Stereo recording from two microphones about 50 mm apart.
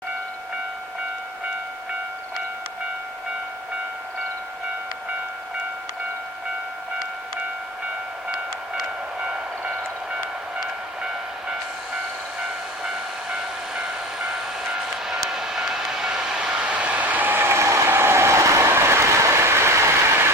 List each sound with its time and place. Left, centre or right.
13.3 s train: centre; by 17.8 s right
17.8 s vehicle: right
18.7 s train: right